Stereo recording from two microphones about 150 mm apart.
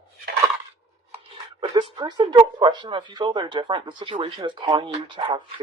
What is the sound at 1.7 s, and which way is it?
Speech, 30° right (ahead or behind).